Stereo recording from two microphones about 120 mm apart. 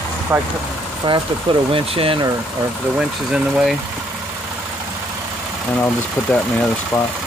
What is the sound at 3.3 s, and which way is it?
Speech, 5° right (ahead or behind).